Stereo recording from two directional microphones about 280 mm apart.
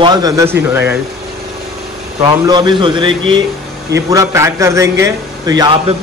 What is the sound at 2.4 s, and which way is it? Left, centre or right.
A man's voice, centre.